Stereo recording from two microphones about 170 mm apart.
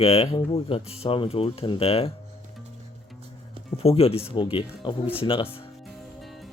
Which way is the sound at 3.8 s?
35° left (ahead or behind).